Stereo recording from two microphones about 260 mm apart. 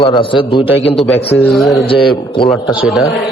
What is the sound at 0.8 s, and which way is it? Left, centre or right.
A man's voice, centre.